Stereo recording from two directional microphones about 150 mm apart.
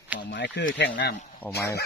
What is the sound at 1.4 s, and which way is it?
Speech, 20° left (ahead or behind).